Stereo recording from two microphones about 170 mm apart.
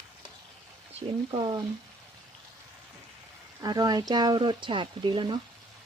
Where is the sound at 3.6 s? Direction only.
20° right (ahead or behind).